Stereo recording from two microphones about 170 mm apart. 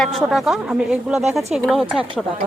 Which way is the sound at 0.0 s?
Centre (ahead or behind).